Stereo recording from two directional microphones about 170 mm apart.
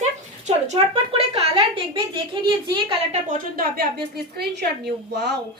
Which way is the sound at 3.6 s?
70° right (ahead or behind).